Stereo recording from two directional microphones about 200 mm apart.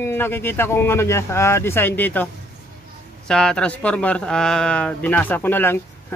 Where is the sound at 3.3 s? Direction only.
5° left (ahead or behind).